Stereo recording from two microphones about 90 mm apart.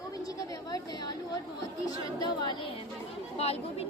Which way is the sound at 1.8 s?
50° left (ahead or behind).